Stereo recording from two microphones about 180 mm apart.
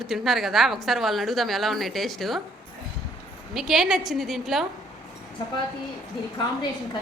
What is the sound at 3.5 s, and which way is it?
A woman's voice, centre (ahead or behind).